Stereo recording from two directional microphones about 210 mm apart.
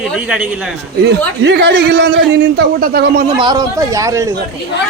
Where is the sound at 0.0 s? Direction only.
5° right (ahead or behind).